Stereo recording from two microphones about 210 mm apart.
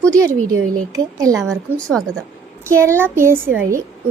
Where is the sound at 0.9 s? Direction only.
15° right (ahead or behind).